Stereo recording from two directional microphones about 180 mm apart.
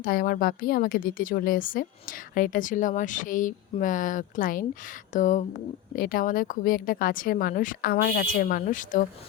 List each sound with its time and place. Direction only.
0.0 s a woman's voice: 55° left (ahead or behind)